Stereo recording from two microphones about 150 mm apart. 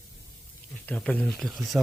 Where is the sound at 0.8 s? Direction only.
5° left (ahead or behind).